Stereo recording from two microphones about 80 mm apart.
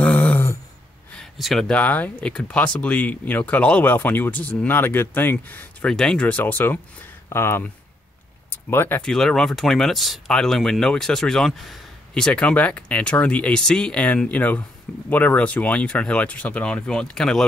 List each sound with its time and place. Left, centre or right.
0.0 s a sound: left
1.4 s speech: centre
1.7 s speech: centre
5.9 s speech: centre; by 9.0 s left
9.0 s speech: centre